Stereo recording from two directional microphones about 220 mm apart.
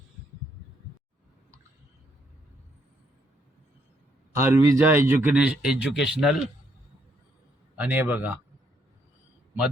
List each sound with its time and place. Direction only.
4.4 s a man's voice: 10° right (ahead or behind)
7.8 s a man's voice: 10° right (ahead or behind)